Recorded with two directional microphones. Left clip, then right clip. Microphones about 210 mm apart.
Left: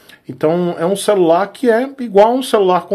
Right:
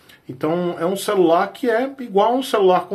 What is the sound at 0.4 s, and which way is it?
Speech, 45° left (ahead or behind).